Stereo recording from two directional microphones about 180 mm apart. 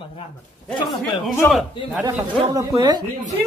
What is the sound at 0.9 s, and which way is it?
Speech, centre (ahead or behind).